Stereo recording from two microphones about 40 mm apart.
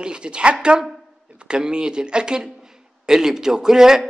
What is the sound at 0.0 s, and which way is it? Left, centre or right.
A man's voice, right.